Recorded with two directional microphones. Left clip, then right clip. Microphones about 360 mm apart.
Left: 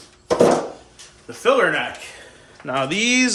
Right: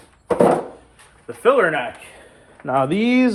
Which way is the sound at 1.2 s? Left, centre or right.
Centre.